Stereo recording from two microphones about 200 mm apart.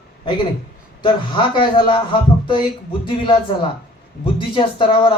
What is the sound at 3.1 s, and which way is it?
Speech, 25° left (ahead or behind).